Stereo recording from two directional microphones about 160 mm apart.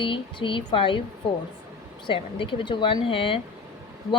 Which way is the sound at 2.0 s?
30° left (ahead or behind).